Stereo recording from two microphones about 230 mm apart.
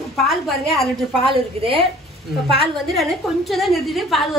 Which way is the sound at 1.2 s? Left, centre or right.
Right.